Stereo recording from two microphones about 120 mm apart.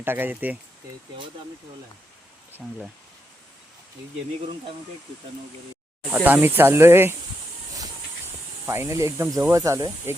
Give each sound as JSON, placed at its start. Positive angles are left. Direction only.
{"t": 0.0, "sound": "speech", "side_deg": -15}
{"t": 6.1, "sound": "speech", "side_deg": -15}
{"t": 8.6, "sound": "speech", "side_deg": -20}